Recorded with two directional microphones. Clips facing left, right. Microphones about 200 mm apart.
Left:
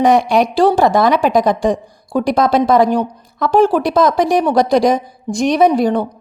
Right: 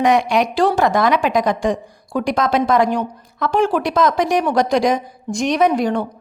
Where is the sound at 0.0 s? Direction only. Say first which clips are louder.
Left 3 dB; 35° left (ahead or behind).